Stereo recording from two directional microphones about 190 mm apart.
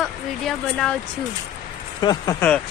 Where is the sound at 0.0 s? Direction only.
5° left (ahead or behind).